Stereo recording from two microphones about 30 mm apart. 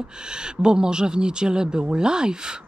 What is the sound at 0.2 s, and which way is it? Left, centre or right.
Speech, right.